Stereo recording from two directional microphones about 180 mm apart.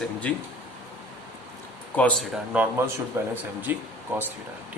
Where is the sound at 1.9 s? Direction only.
10° left (ahead or behind).